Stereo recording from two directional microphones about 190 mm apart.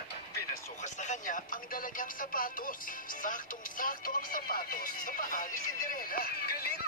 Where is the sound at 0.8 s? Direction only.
40° left (ahead or behind).